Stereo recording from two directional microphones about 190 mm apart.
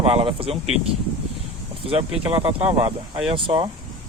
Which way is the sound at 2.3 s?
30° right (ahead or behind).